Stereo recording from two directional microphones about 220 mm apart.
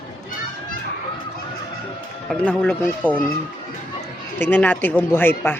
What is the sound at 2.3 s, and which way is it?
Speech, 5° left (ahead or behind).